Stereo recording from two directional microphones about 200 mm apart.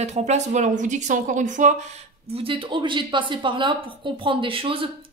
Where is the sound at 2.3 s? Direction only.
25° right (ahead or behind).